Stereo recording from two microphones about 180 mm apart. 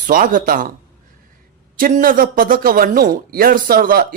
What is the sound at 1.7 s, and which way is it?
Speech, 50° right (ahead or behind).